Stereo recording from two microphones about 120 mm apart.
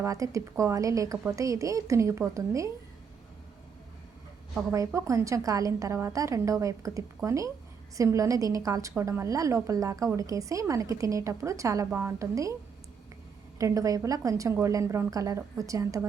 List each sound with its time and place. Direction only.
0.0 s a woman's voice: 25° right (ahead or behind)
4.9 s a woman's voice: 25° right (ahead or behind)
13.6 s a woman's voice: 25° right (ahead or behind)